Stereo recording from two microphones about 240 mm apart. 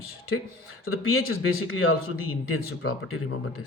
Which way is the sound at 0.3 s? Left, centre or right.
Left.